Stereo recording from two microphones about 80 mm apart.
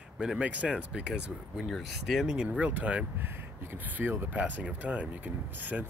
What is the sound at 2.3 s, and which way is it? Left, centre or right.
Speech, centre.